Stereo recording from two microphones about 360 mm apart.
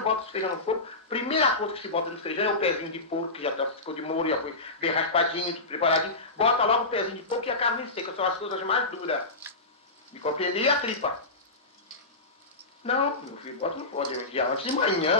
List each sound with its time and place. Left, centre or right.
0.0 s speech: centre
10.2 s speech: centre
12.9 s speech: centre